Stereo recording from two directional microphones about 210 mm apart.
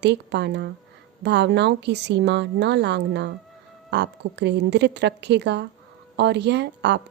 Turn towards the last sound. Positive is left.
turn(degrees=-55)  # may be behind; listen again after turning